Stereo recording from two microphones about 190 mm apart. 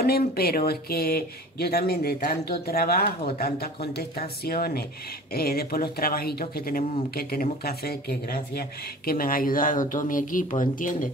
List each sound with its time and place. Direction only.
0.0 s speech: 55° left (ahead or behind)